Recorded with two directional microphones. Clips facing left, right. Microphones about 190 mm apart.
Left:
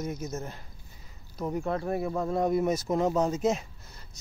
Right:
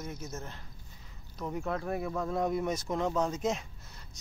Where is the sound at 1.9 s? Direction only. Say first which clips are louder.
Left 4 dB; 20° left (ahead or behind).